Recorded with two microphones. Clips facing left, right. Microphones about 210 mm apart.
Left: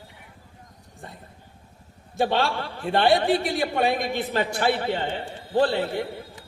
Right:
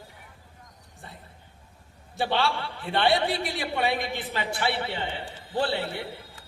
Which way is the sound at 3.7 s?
45° left (ahead or behind).